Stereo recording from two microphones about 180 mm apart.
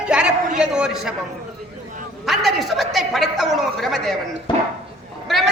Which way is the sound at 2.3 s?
Centre (ahead or behind).